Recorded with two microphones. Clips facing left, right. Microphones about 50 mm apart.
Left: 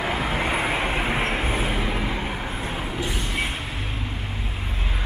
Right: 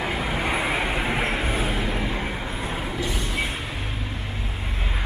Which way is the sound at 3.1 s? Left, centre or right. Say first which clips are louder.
Even; centre.